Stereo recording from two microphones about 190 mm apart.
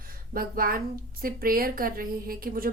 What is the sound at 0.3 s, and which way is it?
A woman's voice, 50° right (ahead or behind).